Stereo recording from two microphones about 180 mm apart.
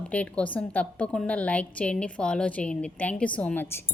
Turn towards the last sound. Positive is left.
turn(degrees=10)  # may be behind; listen again after turning